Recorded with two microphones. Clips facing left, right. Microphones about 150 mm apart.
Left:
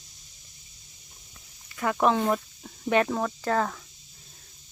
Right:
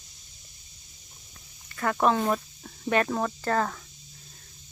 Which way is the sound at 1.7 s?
10° left (ahead or behind).